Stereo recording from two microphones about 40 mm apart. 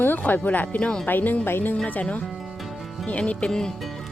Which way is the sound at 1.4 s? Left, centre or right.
Left.